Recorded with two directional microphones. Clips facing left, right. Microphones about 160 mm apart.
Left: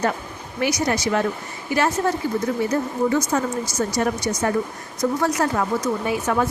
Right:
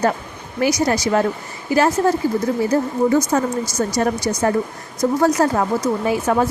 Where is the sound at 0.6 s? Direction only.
35° right (ahead or behind).